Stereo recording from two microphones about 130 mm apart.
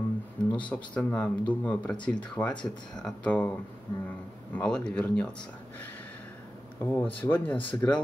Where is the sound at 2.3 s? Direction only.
10° left (ahead or behind).